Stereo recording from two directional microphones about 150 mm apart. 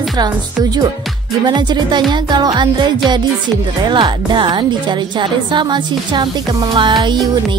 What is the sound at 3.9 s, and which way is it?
A woman's voice, 30° right (ahead or behind).